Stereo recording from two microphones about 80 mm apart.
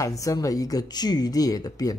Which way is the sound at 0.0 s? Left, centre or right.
Left.